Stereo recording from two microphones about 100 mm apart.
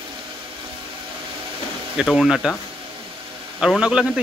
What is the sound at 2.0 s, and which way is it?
Speech, centre (ahead or behind).